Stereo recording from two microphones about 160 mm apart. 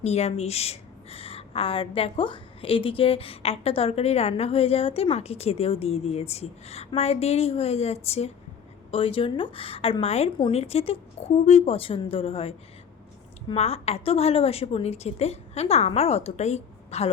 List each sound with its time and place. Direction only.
0.0 s a woman's voice: 40° left (ahead or behind)